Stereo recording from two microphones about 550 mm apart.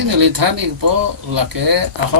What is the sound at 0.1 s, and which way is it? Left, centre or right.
Speech, right.